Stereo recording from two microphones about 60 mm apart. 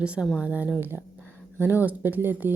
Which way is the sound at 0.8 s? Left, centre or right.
Right.